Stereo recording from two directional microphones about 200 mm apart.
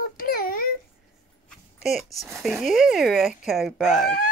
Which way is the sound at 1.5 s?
Centre (ahead or behind).